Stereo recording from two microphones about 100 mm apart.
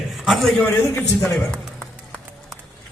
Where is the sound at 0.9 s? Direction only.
15° left (ahead or behind).